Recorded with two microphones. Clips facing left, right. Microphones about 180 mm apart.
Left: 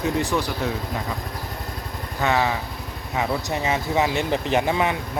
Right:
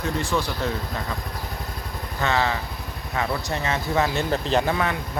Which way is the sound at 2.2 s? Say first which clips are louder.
Left 2 dB; 15° left (ahead or behind).